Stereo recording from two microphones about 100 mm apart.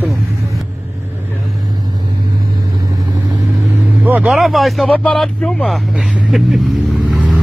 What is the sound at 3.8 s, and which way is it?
Vehicle, 15° right (ahead or behind).